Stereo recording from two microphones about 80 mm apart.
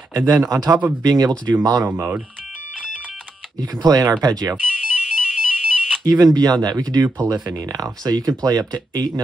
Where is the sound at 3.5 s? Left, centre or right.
Right.